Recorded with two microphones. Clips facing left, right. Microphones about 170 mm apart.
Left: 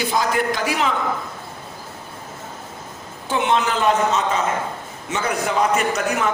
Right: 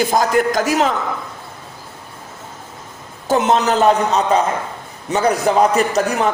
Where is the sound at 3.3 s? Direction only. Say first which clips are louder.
Right 5 dB; 40° right (ahead or behind).